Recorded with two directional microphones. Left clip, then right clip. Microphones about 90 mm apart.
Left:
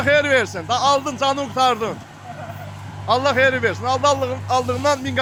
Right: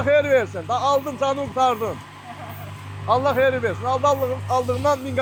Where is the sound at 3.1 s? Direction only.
60° left (ahead or behind).